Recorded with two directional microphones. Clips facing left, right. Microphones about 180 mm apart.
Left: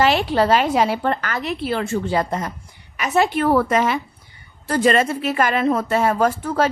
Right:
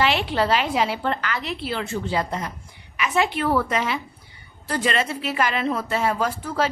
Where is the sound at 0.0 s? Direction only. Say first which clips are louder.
Left 5 dB; 40° left (ahead or behind).